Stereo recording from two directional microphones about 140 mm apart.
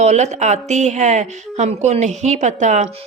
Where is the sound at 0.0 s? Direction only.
55° right (ahead or behind).